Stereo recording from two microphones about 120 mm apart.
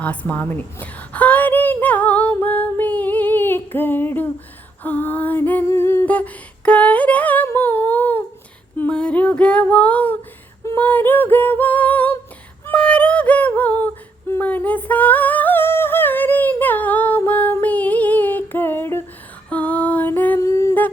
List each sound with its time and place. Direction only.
0.0 s a sound: 10° left (ahead or behind)
2.3 s singing: 15° left (ahead or behind)
4.8 s a sound: 15° left (ahead or behind)
7.4 s humming: 15° left (ahead or behind)
8.8 s female singing: 10° left (ahead or behind)
10.6 s singing: 20° left (ahead or behind)
19.5 s female singing: 10° left (ahead or behind)